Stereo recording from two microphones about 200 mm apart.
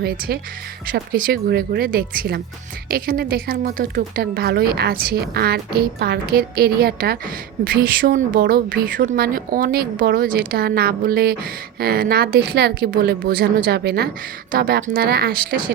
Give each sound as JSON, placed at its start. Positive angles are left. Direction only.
{"t": 0.9, "sound": "a woman's voice", "side_deg": -50}